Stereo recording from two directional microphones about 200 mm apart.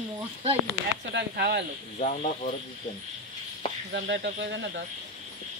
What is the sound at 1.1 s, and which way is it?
Speech, 55° right (ahead or behind).